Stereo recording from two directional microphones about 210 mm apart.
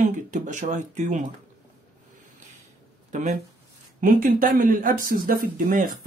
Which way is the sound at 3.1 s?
35° right (ahead or behind).